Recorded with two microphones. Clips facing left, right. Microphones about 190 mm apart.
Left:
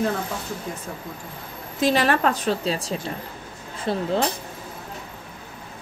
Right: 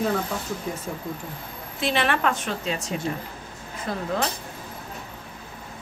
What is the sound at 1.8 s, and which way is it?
A woman's voice, 40° left (ahead or behind).